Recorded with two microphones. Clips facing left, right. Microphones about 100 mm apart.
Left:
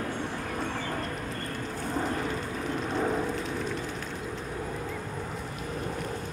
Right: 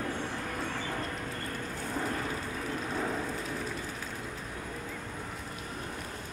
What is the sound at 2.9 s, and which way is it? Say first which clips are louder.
Vehicle: left 6 dB; 15° left (ahead or behind).